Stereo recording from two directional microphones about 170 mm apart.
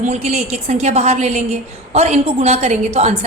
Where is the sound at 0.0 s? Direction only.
40° right (ahead or behind).